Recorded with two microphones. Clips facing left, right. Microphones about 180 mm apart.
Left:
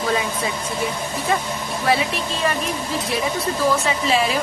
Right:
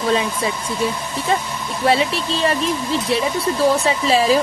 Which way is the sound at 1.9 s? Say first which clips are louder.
Right 3 dB; 30° right (ahead or behind).